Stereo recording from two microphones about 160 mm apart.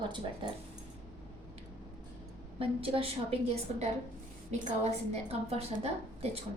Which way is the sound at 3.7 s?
35° right (ahead or behind).